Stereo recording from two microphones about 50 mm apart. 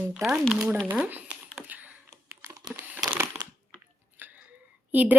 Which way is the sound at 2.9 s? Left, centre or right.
Right.